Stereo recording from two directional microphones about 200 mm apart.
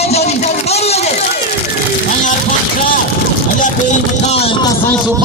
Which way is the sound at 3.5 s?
40° left (ahead or behind).